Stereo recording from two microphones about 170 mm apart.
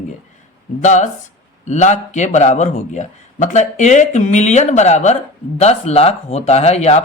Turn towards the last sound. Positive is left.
turn(degrees=40)  # may be behind; listen again after turning